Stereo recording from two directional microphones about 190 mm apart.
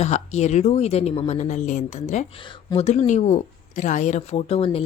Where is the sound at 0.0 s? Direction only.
35° left (ahead or behind).